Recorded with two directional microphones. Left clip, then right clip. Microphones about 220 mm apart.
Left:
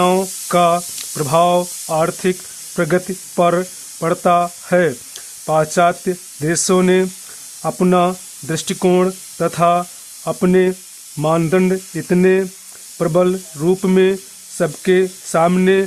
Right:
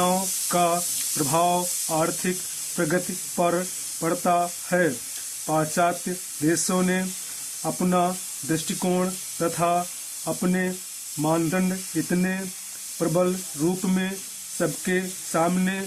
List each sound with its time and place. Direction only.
0.0 s spray: 45° left (ahead or behind)
2.7 s speech: 45° left (ahead or behind)